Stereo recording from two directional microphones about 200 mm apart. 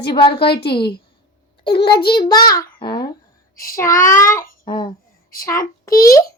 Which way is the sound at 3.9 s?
40° left (ahead or behind).